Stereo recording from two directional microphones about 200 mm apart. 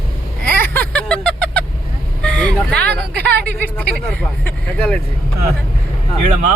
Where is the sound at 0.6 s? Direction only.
10° left (ahead or behind).